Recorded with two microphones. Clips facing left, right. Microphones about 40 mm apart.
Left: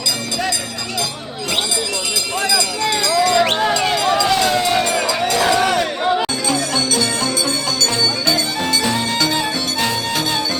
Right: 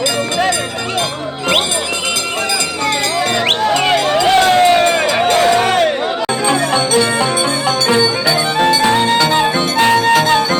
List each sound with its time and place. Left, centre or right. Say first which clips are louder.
2.5 s music: even; right
6.5 s music: right 8 dB; right
8.8 s music: right 7 dB; right